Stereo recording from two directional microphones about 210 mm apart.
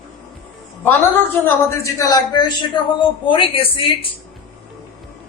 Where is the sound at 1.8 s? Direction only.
15° left (ahead or behind).